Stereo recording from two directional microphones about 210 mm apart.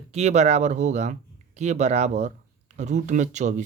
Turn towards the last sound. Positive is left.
turn(degrees=-35)  # may be behind; listen again after turning